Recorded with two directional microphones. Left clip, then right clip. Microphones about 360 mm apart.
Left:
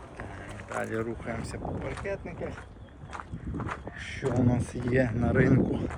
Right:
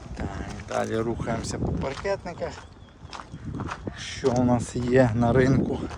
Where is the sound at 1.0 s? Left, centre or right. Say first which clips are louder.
Right 6 dB; centre.